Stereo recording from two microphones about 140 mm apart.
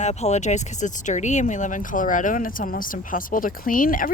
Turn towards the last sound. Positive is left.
turn(degrees=80)